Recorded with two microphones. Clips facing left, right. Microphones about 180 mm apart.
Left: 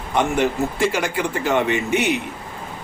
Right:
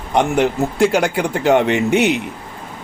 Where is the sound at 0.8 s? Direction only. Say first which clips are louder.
Right 9 dB; 60° right (ahead or behind).